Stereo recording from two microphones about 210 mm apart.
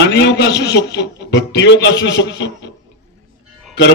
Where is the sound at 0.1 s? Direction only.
55° left (ahead or behind).